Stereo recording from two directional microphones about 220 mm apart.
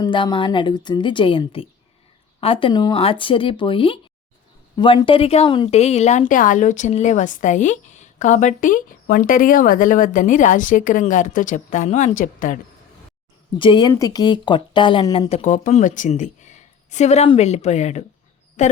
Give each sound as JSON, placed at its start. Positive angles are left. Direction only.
{"t": 0.0, "sound": "a woman's voice", "side_deg": 20}
{"t": 13.6, "sound": "a woman's voice", "side_deg": 20}